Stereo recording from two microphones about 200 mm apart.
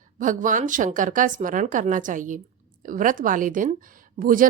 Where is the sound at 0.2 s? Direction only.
40° right (ahead or behind).